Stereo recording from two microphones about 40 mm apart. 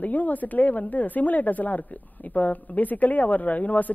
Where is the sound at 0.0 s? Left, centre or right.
Left.